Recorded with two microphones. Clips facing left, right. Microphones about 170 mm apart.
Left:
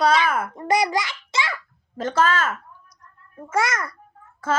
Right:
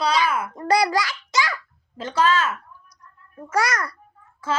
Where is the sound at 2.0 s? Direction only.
45° left (ahead or behind).